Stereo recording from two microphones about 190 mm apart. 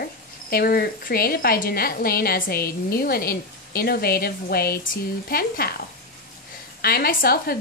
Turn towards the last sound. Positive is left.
turn(degrees=50)  # may be behind; listen again after turning